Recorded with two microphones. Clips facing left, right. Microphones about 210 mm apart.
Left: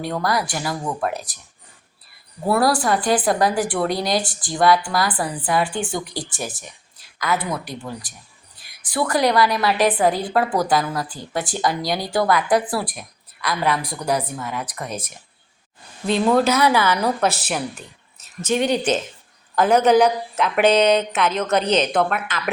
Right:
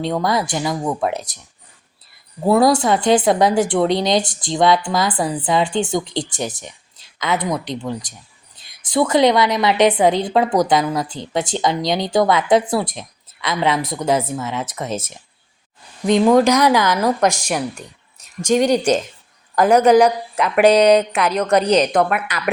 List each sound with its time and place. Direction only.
0.0 s a woman's voice: 20° right (ahead or behind)
2.5 s a woman's voice: 20° right (ahead or behind)
19.8 s speech: 5° left (ahead or behind)